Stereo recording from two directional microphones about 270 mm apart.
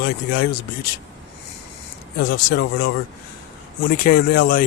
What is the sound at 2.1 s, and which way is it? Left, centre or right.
Speech, left.